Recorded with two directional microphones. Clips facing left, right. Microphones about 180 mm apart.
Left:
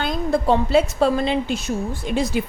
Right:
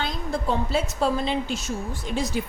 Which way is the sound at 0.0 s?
65° left (ahead or behind).